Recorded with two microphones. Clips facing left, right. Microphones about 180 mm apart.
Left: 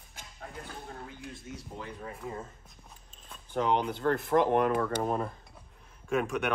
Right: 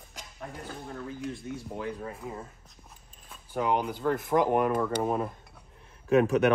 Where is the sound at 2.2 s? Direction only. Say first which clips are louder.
Even; 5° right (ahead or behind).